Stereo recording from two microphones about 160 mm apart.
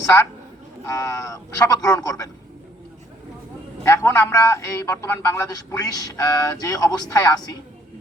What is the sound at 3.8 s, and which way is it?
A man's voice, 20° left (ahead or behind).